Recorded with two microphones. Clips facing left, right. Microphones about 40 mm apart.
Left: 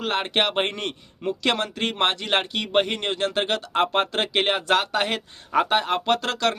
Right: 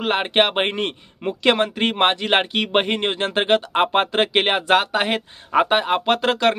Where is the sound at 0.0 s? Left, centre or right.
Right.